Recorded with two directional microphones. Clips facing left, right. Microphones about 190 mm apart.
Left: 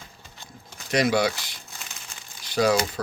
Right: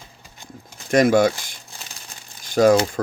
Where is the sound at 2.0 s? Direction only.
45° right (ahead or behind).